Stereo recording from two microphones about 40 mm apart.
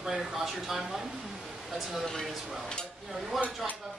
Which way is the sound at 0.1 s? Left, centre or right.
Centre.